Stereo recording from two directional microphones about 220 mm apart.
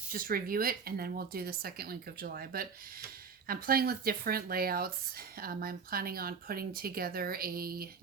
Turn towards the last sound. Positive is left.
turn(degrees=-40)  # may be behind; listen again after turning